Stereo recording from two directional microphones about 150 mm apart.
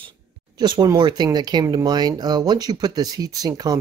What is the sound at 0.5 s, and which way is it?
Speech, 25° right (ahead or behind).